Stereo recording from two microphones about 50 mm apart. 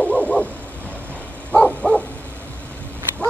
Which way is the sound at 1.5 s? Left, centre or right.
Left.